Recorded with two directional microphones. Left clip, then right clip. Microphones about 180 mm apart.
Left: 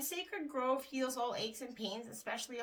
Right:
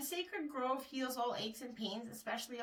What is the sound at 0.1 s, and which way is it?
Speech, 45° left (ahead or behind).